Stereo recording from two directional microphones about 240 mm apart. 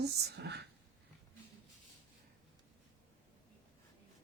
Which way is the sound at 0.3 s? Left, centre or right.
Right.